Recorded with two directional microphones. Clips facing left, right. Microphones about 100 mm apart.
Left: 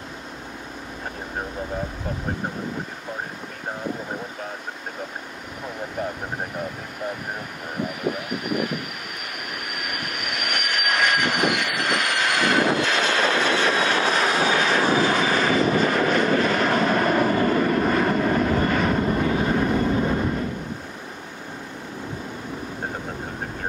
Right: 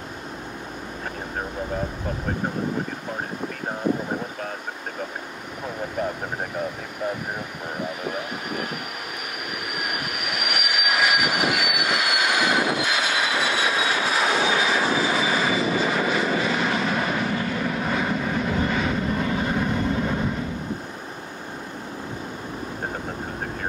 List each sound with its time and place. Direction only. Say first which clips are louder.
10.4 s train: even; 5° right (ahead or behind)
17.3 s vehicle: left 6 dB; 45° left (ahead or behind)
17.6 s vehicle: left 4 dB; 5° right (ahead or behind)